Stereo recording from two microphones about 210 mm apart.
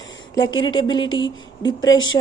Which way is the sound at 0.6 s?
20° left (ahead or behind).